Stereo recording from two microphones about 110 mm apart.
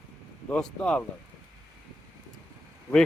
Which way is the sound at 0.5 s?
10° left (ahead or behind).